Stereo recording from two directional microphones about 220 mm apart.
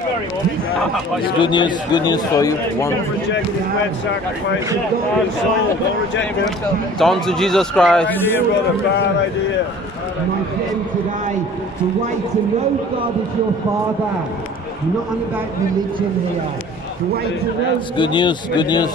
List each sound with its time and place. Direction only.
1.4 s a man's voice: 20° left (ahead or behind)
7.0 s speech: centre (ahead or behind)
17.9 s a man's voice: 20° left (ahead or behind)